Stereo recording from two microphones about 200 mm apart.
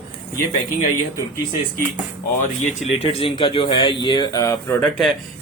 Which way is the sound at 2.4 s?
35° left (ahead or behind).